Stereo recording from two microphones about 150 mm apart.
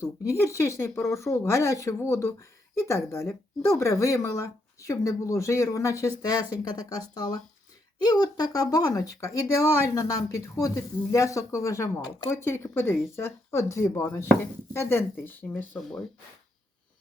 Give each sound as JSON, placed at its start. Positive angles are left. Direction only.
{"t": 0.0, "sound": "speech", "side_deg": 20}